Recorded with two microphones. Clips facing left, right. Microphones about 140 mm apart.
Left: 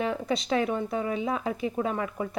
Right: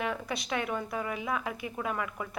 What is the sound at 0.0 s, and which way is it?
A woman's voice, 25° left (ahead or behind).